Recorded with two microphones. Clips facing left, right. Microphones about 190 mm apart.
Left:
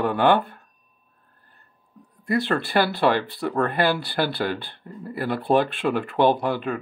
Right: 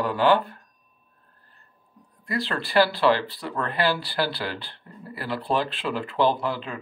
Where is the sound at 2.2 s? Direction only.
55° left (ahead or behind).